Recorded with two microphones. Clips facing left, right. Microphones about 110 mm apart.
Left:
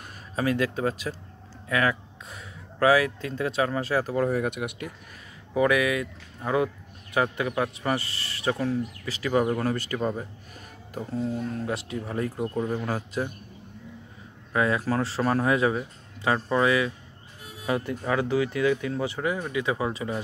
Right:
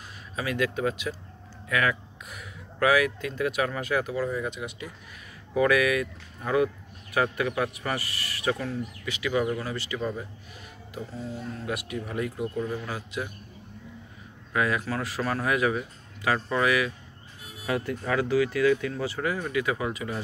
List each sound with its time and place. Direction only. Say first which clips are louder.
0.4 s speech: left 2 dB; 30° left (ahead or behind)
4.1 s speech: left 4 dB; 60° left (ahead or behind)
5.5 s speech: even; 20° left (ahead or behind); by 9.6 s 40° left (ahead or behind)
9.6 s speech: left 4 dB; 50° left (ahead or behind)
11.5 s speech: left 2 dB; 30° left (ahead or behind)
12.8 s speech: left 5 dB; 40° left (ahead or behind)
14.5 s speech: left 3 dB; 30° left (ahead or behind)